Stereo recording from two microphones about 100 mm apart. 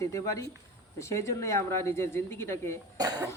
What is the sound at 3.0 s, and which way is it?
Speech, 40° right (ahead or behind).